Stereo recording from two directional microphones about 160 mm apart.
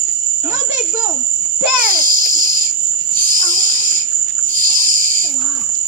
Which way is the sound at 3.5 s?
60° right (ahead or behind).